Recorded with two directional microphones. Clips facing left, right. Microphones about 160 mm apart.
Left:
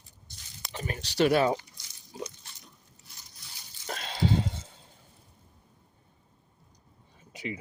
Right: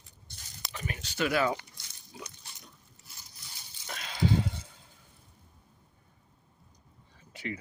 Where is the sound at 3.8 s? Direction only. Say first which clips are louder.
Left 1 dB; 35° left (ahead or behind).